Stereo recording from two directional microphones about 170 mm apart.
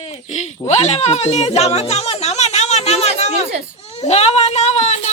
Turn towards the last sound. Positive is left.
turn(degrees=40)  # may be behind; listen again after turning